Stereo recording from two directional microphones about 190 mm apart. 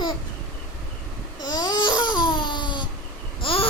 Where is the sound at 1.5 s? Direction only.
25° left (ahead or behind).